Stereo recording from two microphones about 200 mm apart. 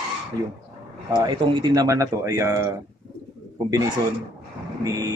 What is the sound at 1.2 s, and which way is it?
Speech, 20° right (ahead or behind).